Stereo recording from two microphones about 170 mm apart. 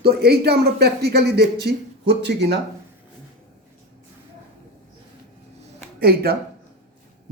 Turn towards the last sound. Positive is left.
turn(degrees=-65)  # may be behind; listen again after turning